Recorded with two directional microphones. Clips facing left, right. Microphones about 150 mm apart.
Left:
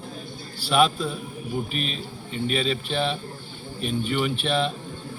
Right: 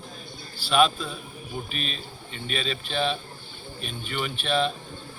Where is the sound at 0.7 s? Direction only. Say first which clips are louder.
Left 1 dB; 15° left (ahead or behind).